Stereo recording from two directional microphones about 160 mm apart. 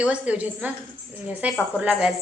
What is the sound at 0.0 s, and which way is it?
A woman's voice, 5° right (ahead or behind).